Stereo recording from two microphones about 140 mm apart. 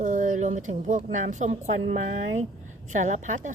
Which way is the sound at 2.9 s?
60° right (ahead or behind).